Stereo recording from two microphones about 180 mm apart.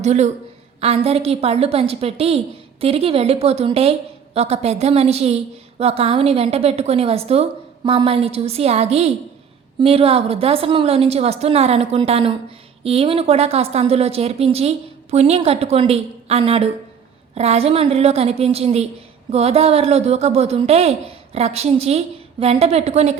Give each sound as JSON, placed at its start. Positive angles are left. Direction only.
{"t": 0.0, "sound": "a woman's voice", "side_deg": -40}